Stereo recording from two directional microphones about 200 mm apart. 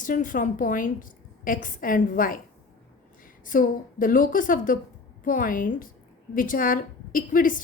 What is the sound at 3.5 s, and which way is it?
A woman's voice, 45° left (ahead or behind).